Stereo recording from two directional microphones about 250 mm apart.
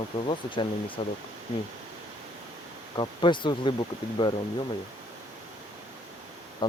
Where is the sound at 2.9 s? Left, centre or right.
Centre.